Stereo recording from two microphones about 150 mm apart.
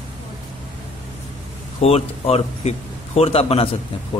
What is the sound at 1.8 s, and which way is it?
Speech, 45° left (ahead or behind).